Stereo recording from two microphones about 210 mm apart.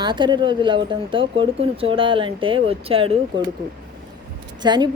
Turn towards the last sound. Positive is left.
turn(degrees=-20)  # may be behind; listen again after turning